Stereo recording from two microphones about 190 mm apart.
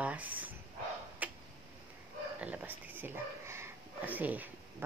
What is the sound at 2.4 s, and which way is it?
Speech, 10° right (ahead or behind).